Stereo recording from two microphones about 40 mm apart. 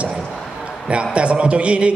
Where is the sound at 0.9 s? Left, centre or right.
Right.